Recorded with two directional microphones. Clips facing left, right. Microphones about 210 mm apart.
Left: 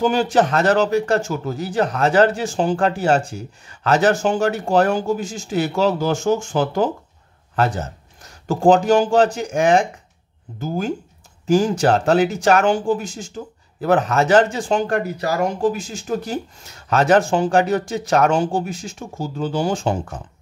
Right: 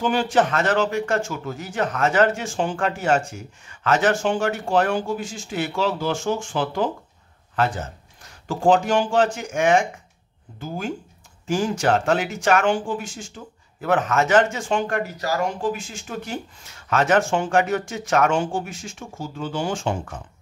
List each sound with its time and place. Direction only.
0.0 s speech: 40° left (ahead or behind)
11.4 s speech: 40° left (ahead or behind)